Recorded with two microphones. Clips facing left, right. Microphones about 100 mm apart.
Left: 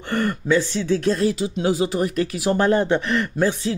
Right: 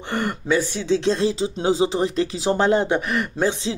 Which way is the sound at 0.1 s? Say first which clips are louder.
Left 2 dB; 20° right (ahead or behind).